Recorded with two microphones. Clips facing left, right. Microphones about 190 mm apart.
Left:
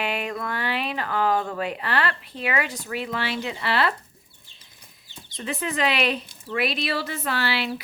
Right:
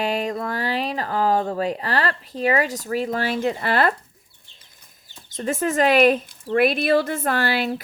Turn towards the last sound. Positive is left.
turn(degrees=-50)  # may be behind; listen again after turning